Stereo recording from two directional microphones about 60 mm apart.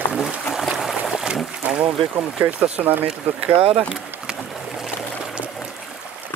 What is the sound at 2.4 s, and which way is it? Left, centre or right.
Speech, right.